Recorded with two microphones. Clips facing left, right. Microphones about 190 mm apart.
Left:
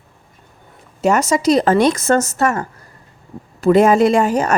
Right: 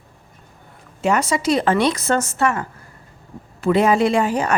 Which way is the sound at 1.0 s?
45° left (ahead or behind).